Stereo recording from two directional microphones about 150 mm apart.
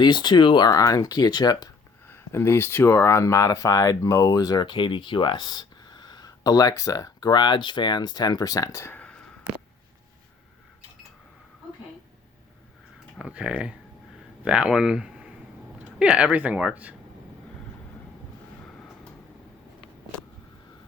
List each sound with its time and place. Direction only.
0.0 s speech: 30° left (ahead or behind); by 9.3 s 5° left (ahead or behind)
13.1 s speech: 5° right (ahead or behind)